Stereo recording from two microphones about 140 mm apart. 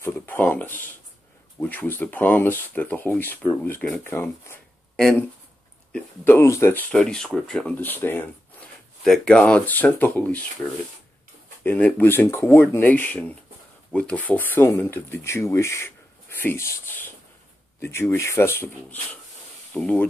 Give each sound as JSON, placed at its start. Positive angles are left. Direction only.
{"t": 0.0, "sound": "a sound", "side_deg": 15}
{"t": 1.6, "sound": "speech", "side_deg": 15}
{"t": 4.9, "sound": "speech", "side_deg": 5}
{"t": 5.9, "sound": "speech", "side_deg": 15}
{"t": 6.9, "sound": "speech", "side_deg": 5}
{"t": 11.6, "sound": "speech", "side_deg": 15}
{"t": 19.7, "sound": "speech", "side_deg": 5}